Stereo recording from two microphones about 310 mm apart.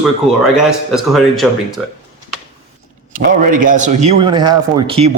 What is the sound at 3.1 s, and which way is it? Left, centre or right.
A man's voice, right.